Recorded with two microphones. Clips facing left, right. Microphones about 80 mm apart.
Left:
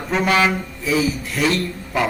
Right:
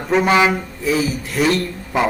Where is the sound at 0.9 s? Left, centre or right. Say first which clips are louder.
Even; centre.